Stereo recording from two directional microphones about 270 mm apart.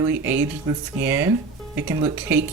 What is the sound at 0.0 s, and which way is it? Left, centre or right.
Speech, centre.